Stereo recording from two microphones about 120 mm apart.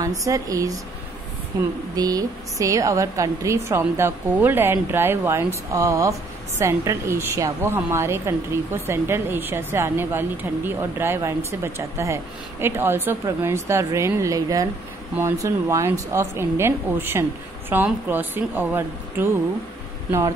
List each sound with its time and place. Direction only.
0.0 s a woman's voice: 30° right (ahead or behind)